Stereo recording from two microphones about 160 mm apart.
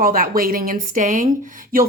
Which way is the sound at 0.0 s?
65° right (ahead or behind).